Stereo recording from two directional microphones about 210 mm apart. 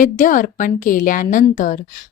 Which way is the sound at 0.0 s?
40° left (ahead or behind).